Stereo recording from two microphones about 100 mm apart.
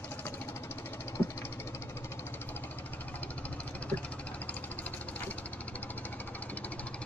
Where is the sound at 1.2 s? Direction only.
20° left (ahead or behind).